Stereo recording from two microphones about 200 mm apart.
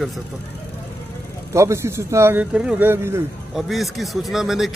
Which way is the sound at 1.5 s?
15° right (ahead or behind).